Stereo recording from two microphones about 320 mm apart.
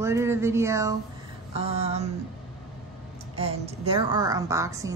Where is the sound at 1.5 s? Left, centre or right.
Centre.